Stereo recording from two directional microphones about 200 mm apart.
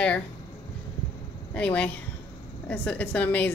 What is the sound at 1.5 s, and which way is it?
A woman's voice, 5° left (ahead or behind).